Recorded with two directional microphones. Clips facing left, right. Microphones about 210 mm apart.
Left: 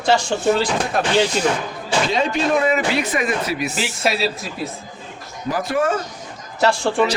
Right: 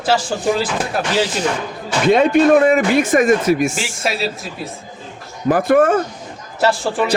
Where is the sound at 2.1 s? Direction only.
55° right (ahead or behind).